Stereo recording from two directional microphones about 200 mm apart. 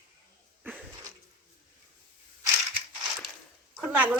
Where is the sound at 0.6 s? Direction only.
5° right (ahead or behind).